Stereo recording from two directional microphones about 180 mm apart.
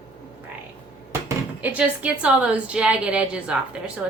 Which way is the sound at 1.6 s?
10° right (ahead or behind).